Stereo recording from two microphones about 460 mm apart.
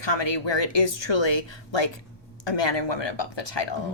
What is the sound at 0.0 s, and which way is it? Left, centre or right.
Speech, left.